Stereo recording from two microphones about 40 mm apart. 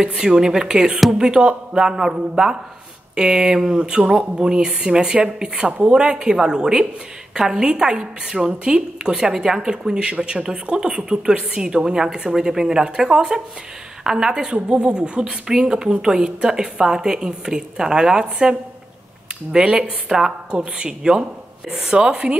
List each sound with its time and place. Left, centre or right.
0.2 s a woman's voice: centre
9.9 s a woman's voice: right